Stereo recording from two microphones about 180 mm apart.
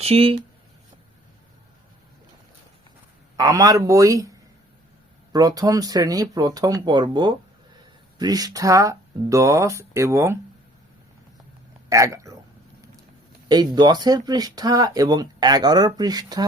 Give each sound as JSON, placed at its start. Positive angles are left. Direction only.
{"t": 0.0, "sound": "speech", "side_deg": -35}
{"t": 3.3, "sound": "speech", "side_deg": -20}
{"t": 5.3, "sound": "speech", "side_deg": -20}
{"t": 11.9, "sound": "a sound", "side_deg": -15}
{"t": 13.5, "sound": "speech", "side_deg": -25}